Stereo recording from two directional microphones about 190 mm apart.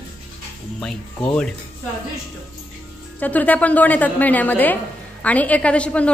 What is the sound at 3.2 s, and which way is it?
A woman's voice, 10° left (ahead or behind).